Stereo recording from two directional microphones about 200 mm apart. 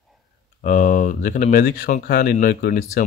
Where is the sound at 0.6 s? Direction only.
40° left (ahead or behind).